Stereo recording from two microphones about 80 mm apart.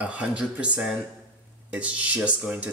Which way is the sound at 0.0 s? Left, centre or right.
Centre.